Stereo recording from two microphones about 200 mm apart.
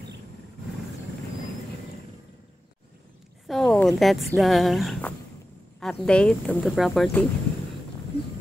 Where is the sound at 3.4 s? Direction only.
Centre (ahead or behind).